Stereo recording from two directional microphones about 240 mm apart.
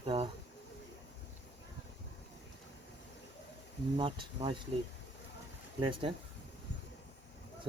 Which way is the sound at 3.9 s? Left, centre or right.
Centre.